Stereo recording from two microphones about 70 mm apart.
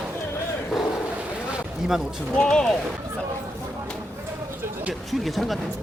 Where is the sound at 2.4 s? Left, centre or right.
Centre.